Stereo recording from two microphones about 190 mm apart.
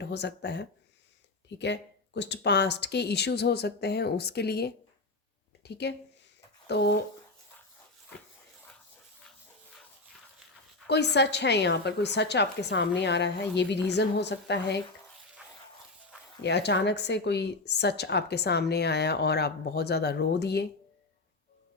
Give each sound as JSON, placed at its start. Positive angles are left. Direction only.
{"t": 0.0, "sound": "a woman's voice", "side_deg": 65}
{"t": 10.8, "sound": "a woman's voice", "side_deg": 65}
{"t": 16.4, "sound": "a woman's voice", "side_deg": 65}